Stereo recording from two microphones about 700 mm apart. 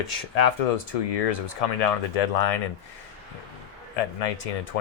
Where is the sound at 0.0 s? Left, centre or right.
Left.